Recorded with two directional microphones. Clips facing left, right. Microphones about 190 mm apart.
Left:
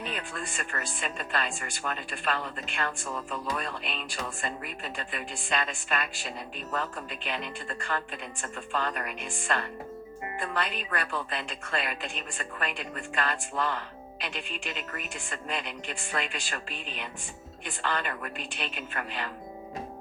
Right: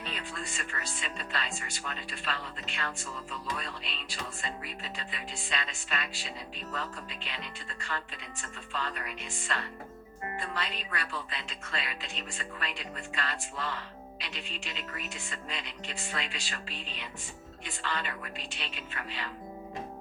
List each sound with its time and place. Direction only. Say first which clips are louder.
0.1 s a woman's voice: left 3 dB; 55° left (ahead or behind)